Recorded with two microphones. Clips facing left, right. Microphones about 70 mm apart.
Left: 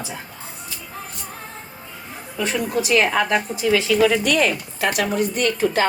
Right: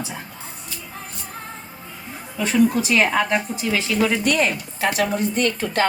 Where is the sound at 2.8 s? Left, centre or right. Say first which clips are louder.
Left 1 dB; left.